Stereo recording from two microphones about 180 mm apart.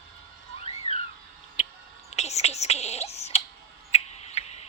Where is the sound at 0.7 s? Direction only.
35° left (ahead or behind).